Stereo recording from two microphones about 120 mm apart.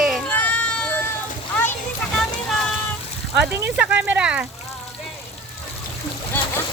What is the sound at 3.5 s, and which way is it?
Speech, 10° right (ahead or behind).